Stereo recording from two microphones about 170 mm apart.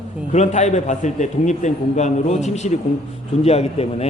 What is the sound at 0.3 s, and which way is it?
A man's voice, 40° left (ahead or behind).